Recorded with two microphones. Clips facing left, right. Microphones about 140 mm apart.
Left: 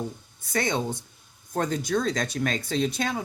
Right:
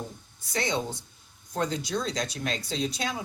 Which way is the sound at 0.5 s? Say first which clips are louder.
Left 3 dB; 50° left (ahead or behind).